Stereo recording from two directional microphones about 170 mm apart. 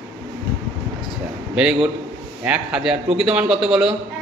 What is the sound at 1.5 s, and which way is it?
A man's voice, 5° right (ahead or behind).